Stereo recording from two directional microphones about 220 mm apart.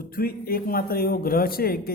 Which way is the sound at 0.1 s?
40° left (ahead or behind).